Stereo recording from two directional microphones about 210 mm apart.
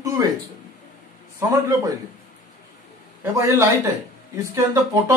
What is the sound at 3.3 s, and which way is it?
Speech, 15° right (ahead or behind).